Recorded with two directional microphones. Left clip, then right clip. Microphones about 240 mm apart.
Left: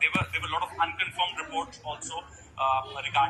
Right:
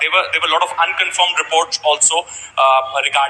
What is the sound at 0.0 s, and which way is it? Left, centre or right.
A man's voice, right.